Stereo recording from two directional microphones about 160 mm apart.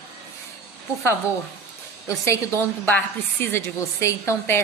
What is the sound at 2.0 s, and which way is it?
A woman's voice, 20° left (ahead or behind).